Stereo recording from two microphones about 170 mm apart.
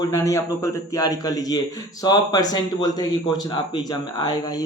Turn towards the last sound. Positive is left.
turn(degrees=25)  # may be behind; listen again after turning